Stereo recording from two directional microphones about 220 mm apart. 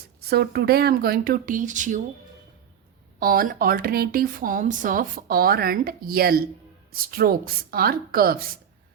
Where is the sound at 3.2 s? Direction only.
40° right (ahead or behind).